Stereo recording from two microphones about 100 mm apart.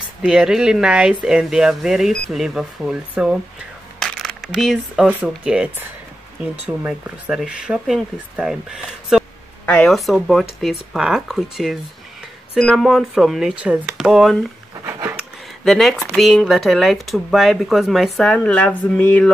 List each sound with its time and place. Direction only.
0.2 s speech: 5° right (ahead or behind)
4.0 s a sound: centre (ahead or behind)
5.0 s speech: 15° right (ahead or behind)
6.9 s speech: 10° right (ahead or behind)
13.6 s speech: 10° right (ahead or behind)
14.9 s a sound: 30° right (ahead or behind)
15.6 s speech: 5° left (ahead or behind)
18.3 s speech: 10° left (ahead or behind)